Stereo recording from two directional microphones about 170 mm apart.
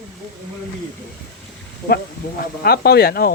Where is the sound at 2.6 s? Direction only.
65° left (ahead or behind).